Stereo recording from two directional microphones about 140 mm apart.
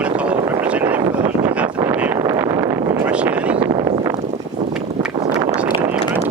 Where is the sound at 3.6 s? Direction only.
30° right (ahead or behind).